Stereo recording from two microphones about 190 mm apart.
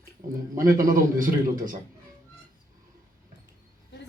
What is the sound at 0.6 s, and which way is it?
Speech, 45° right (ahead or behind).